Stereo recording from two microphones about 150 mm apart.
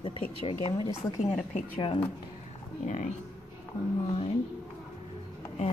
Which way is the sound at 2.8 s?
55° left (ahead or behind).